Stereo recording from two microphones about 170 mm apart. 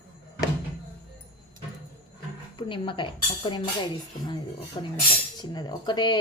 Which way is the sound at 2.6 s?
30° left (ahead or behind).